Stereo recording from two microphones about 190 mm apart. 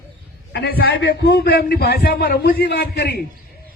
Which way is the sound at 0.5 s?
55° left (ahead or behind).